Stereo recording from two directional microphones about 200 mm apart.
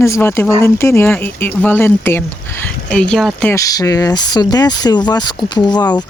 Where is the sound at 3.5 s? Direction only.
15° left (ahead or behind).